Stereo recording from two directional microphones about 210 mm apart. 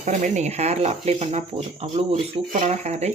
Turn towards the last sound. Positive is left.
turn(degrees=-30)  # may be behind; listen again after turning